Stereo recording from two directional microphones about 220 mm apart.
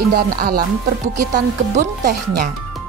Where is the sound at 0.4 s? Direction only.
45° right (ahead or behind).